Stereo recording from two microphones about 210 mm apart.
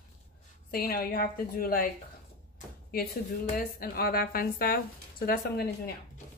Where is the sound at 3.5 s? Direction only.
45° left (ahead or behind).